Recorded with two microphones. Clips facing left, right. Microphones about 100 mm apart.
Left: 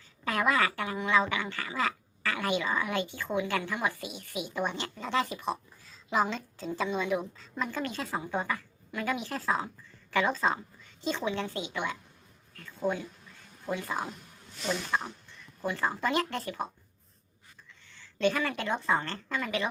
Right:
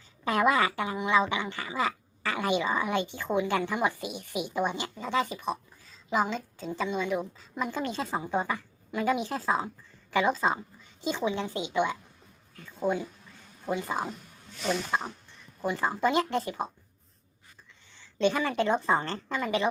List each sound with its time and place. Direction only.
0.3 s speech: 20° right (ahead or behind); by 7.3 s centre (ahead or behind)
7.3 s a woman's voice: 15° right (ahead or behind)
17.8 s a woman's voice: 20° right (ahead or behind)